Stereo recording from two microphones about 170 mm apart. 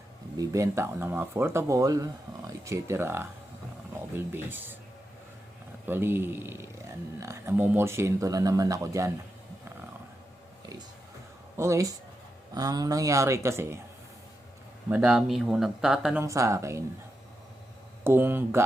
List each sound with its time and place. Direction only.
0.3 s speech: 15° right (ahead or behind)
4.3 s speech: 10° right (ahead or behind)
5.9 s speech: 15° right (ahead or behind)
11.5 s speech: 15° right (ahead or behind)
14.8 s speech: 5° right (ahead or behind)
16.2 s speech: 20° right (ahead or behind)
18.0 s speech: 15° right (ahead or behind)